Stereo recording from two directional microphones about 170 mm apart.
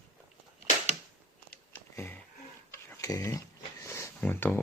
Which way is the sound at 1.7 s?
10° left (ahead or behind).